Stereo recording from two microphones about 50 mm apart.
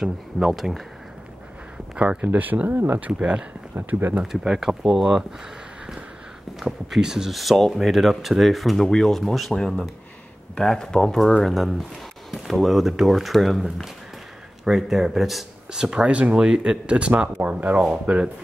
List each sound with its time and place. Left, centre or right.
0.5 s speech: centre
2.0 s speech: right
3.1 s speech: right
3.7 s speech: right
4.2 s speech: centre
6.6 s speech: centre
7.3 s speech: centre
11.2 s speech: centre
15.7 s speech: centre
17.8 s speech: right